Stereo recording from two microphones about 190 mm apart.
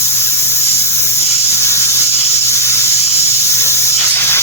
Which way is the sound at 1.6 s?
15° left (ahead or behind).